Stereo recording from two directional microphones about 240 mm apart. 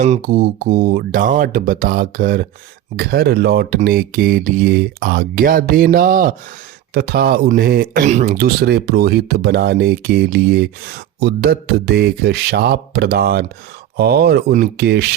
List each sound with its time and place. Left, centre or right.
0.0 s speech: right